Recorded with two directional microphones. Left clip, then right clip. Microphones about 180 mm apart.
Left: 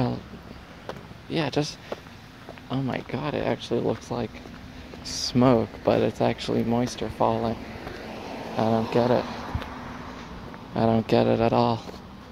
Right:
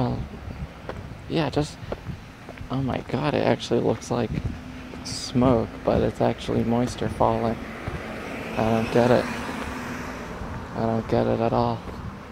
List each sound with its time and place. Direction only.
0.8 s run: 5° left (ahead or behind)
2.7 s speech: 10° left (ahead or behind)
3.1 s speech: 5° right (ahead or behind)
5.2 s speech: 20° left (ahead or behind)
7.8 s vehicle: 10° right (ahead or behind)
8.5 s speech: 10° left (ahead or behind)
9.2 s vehicle: 65° right (ahead or behind)
10.8 s speech: 25° left (ahead or behind)